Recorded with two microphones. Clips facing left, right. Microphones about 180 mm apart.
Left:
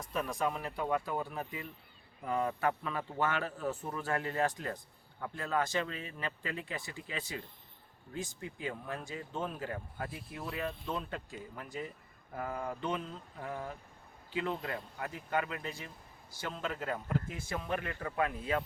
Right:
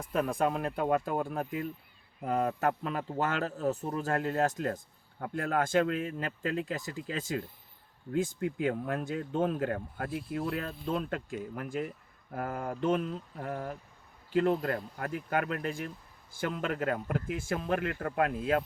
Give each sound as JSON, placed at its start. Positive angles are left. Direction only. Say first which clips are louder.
{"t": 0.3, "sound": "speech", "louder": "right 5 dB", "side_deg": -60}
{"t": 8.1, "sound": "speech", "louder": "right 11 dB", "side_deg": -55}